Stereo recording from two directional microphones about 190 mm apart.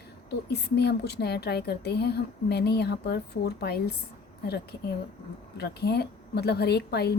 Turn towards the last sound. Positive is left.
turn(degrees=60)  # may be behind; listen again after turning